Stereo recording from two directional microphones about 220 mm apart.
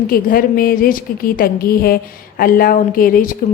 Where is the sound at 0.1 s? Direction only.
40° left (ahead or behind).